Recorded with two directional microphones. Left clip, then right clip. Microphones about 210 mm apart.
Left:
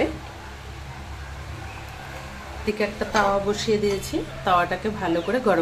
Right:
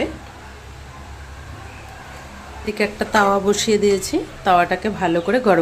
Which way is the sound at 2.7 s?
40° right (ahead or behind).